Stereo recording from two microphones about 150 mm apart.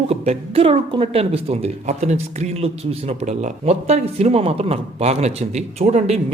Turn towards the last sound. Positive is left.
turn(degrees=-45)  # may be behind; listen again after turning